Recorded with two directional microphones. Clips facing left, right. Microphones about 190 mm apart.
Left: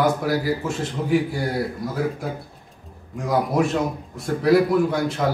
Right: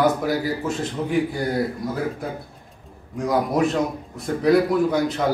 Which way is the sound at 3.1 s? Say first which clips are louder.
Even; centre (ahead or behind).